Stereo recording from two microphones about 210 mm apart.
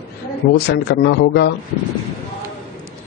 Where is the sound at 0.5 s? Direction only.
50° left (ahead or behind).